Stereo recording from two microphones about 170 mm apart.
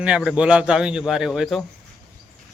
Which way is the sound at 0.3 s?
5° right (ahead or behind).